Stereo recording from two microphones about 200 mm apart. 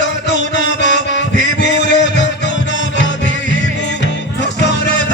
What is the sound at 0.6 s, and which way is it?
Music, 60° left (ahead or behind).